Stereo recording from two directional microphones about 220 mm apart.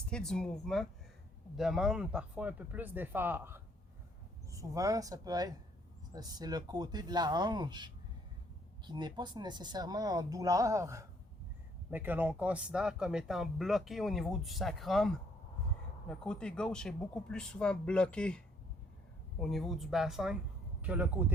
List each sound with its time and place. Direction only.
0.1 s speech: 5° left (ahead or behind)